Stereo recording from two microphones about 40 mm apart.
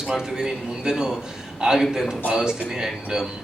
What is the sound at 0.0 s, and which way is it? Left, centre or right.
A man's voice, centre.